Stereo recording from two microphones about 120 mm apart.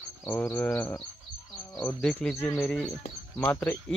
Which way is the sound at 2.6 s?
5° left (ahead or behind).